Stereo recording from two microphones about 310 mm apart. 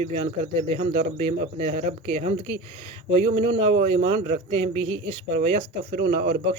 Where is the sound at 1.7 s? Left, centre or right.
Right.